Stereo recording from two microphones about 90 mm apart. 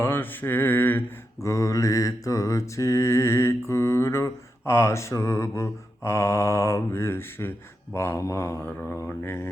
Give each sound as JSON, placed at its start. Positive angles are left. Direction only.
{"t": 0.0, "sound": "mantra", "side_deg": 25}
{"t": 1.4, "sound": "mantra", "side_deg": 35}